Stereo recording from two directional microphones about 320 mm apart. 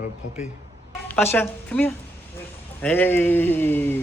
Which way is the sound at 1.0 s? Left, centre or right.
Centre.